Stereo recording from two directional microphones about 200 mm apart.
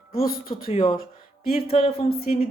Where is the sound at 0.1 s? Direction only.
45° left (ahead or behind).